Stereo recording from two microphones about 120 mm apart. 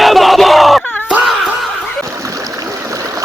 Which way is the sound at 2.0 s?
25° right (ahead or behind).